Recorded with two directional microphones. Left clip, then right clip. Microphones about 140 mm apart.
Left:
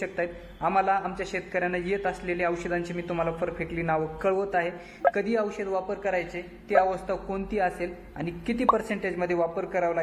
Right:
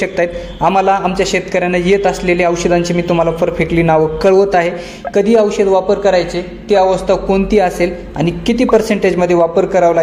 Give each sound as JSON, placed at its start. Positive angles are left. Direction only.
{"t": 0.0, "sound": "a man's voice", "side_deg": -30}
{"t": 5.1, "sound": "a man's voice", "side_deg": -20}